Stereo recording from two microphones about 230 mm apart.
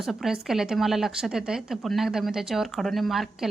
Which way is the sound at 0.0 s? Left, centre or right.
Centre.